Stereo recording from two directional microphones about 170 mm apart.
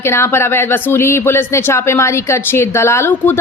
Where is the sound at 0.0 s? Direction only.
15° left (ahead or behind).